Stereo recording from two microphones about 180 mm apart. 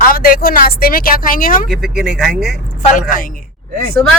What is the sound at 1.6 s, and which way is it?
Speech, centre (ahead or behind).